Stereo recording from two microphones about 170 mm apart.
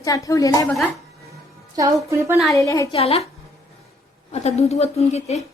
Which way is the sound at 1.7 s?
20° right (ahead or behind).